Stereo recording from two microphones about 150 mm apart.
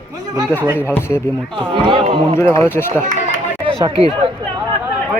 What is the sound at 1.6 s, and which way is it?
Speech, 35° right (ahead or behind).